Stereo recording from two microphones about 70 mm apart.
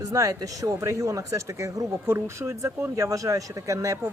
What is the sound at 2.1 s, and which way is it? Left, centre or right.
Speech, right.